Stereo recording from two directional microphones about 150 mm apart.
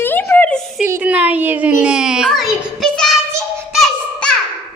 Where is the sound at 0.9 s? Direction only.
10° right (ahead or behind).